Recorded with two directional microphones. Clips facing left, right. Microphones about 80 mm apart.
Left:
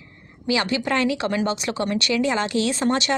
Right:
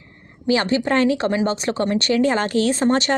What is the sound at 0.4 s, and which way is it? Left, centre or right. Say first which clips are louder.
Speech: right 4 dB; right.